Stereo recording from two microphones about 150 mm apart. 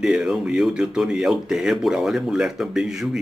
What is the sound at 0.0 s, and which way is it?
A man's voice, 5° right (ahead or behind).